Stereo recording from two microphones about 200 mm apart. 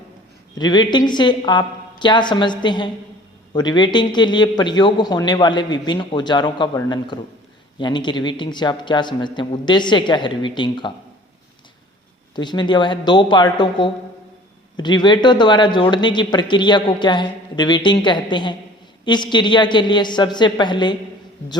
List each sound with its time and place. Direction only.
0.6 s speech: 20° left (ahead or behind)
12.4 s speech: 20° left (ahead or behind)